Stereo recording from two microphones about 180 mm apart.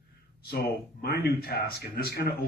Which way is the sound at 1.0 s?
60° left (ahead or behind).